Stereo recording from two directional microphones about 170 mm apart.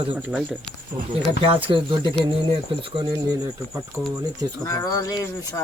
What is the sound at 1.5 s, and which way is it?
Speech, 30° right (ahead or behind).